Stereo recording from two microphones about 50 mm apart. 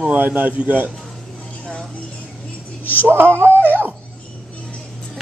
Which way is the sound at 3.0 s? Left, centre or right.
Right.